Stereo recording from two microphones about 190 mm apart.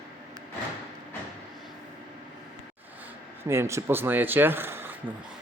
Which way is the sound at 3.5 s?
15° right (ahead or behind).